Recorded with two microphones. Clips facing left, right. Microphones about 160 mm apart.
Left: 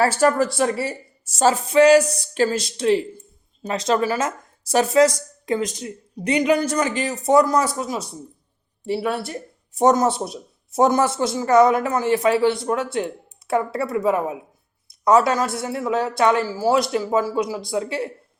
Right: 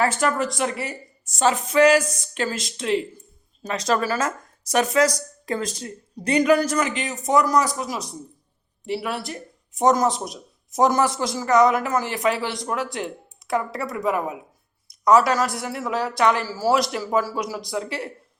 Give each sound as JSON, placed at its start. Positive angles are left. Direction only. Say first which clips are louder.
{"t": 0.0, "sound": "speech", "louder": "left 4 dB", "side_deg": 35}